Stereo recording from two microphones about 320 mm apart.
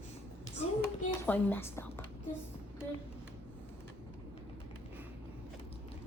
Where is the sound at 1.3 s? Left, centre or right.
Centre.